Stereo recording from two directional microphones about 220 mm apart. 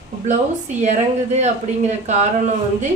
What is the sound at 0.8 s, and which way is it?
A woman's voice, 30° right (ahead or behind).